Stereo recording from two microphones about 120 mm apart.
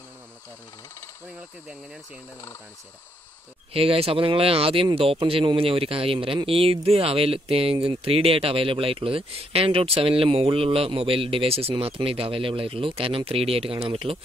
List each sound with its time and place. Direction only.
3.7 s speech: 50° right (ahead or behind)